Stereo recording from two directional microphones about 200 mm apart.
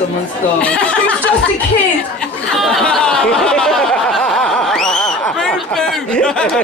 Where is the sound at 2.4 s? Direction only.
5° left (ahead or behind).